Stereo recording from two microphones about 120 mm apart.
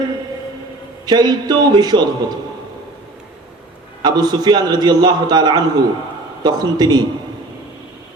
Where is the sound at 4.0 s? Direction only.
35° right (ahead or behind).